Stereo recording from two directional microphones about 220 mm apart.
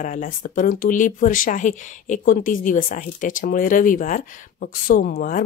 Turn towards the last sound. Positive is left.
turn(degrees=40)  # may be behind; listen again after turning